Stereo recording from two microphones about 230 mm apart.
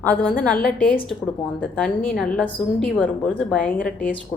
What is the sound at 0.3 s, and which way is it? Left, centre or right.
Speech, left.